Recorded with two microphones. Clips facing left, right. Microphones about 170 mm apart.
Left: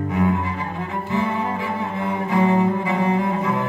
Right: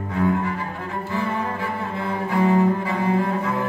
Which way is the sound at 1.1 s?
20° left (ahead or behind).